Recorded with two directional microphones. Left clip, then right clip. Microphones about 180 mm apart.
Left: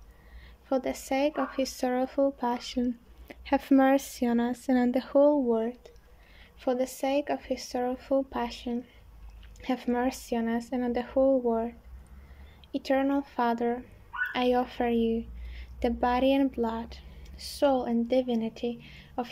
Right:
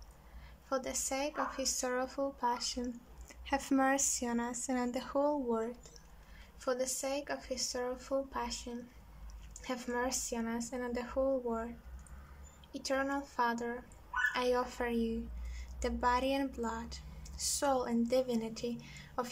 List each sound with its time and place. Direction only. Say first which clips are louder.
0.7 s speech: left 7 dB; 20° left (ahead or behind)
12.7 s speech: left 8 dB; 20° left (ahead or behind)